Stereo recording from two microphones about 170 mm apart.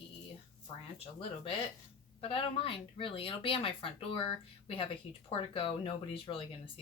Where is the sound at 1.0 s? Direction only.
35° left (ahead or behind).